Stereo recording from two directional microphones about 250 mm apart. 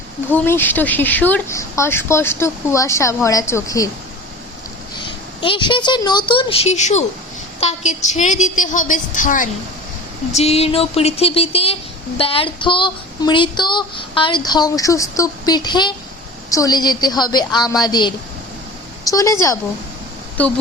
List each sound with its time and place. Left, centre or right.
0.3 s speech: centre
5.0 s a woman's voice: centre